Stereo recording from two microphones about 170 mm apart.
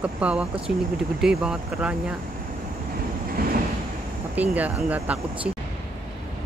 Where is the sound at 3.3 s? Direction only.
60° right (ahead or behind).